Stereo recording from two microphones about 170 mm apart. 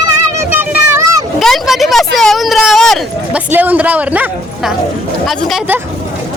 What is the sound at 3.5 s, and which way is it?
Speech, 10° right (ahead or behind).